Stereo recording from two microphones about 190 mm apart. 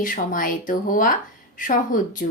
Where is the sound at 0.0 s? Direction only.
45° left (ahead or behind).